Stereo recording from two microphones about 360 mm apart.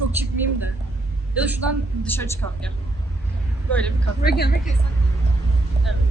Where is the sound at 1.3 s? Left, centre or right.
Centre.